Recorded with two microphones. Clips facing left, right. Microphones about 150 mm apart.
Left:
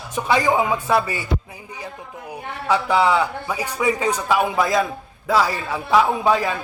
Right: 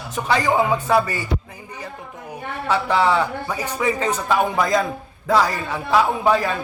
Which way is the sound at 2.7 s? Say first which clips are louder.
Left 1 dB; 10° left (ahead or behind).